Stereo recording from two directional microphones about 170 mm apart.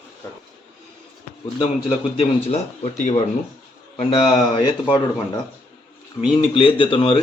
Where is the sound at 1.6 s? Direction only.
35° left (ahead or behind).